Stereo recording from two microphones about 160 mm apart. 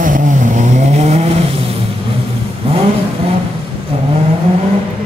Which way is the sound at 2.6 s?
35° right (ahead or behind).